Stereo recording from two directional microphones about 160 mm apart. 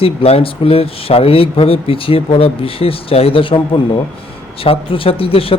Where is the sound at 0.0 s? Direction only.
35° left (ahead or behind).